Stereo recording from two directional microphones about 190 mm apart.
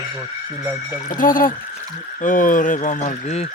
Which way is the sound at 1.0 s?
45° left (ahead or behind).